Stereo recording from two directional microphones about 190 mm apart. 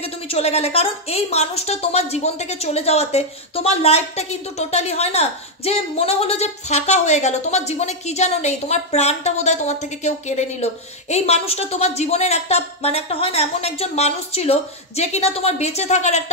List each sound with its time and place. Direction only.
0.0 s speech: 35° left (ahead or behind)